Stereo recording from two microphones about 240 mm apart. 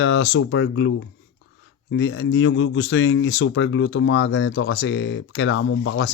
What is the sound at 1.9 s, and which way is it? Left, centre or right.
Speech, left.